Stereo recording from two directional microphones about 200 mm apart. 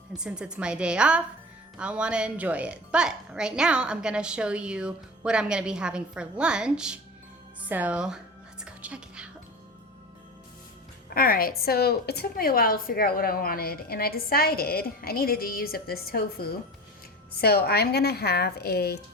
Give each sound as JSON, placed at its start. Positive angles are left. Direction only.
{"t": 0.2, "sound": "a woman's voice", "side_deg": -5}
{"t": 8.6, "sound": "music", "side_deg": -5}
{"t": 11.1, "sound": "a woman's voice", "side_deg": 45}